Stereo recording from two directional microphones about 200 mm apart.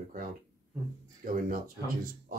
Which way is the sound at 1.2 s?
45° right (ahead or behind).